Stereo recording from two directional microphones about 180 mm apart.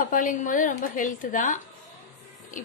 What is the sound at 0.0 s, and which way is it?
A woman's voice, 50° left (ahead or behind).